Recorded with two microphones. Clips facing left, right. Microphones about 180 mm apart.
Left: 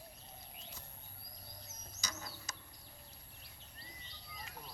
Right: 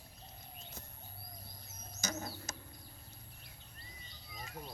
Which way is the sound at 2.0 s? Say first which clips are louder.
Right 7 dB; 50° right (ahead or behind).